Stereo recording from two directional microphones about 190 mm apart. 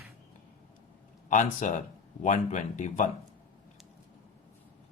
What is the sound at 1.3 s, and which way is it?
Speech, 40° left (ahead or behind).